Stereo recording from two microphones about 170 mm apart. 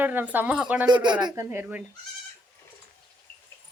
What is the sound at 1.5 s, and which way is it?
Speech, 10° right (ahead or behind).